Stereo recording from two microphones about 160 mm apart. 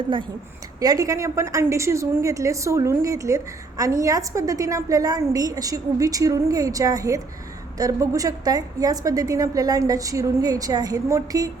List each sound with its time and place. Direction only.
0.8 s a woman's voice: 20° right (ahead or behind)